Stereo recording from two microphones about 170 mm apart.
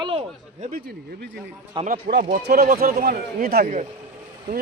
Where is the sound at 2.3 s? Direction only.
60° right (ahead or behind).